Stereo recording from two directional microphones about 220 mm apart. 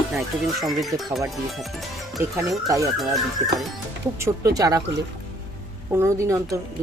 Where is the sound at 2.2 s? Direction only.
15° right (ahead or behind).